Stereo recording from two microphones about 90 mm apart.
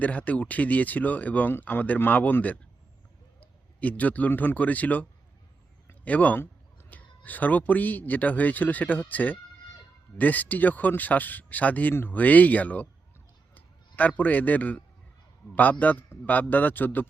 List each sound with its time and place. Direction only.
0.0 s a man's voice: 15° left (ahead or behind)